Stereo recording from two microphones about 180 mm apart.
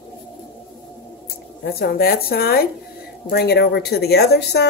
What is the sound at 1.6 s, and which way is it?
A woman's voice, 60° left (ahead or behind).